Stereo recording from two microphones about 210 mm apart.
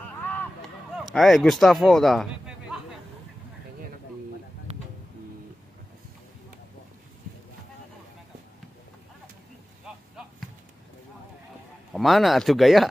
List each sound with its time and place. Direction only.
0.1 s a sound: 10° left (ahead or behind)
0.9 s a man's voice: centre (ahead or behind)
4.7 s music: 30° right (ahead or behind)
11.9 s speech: centre (ahead or behind)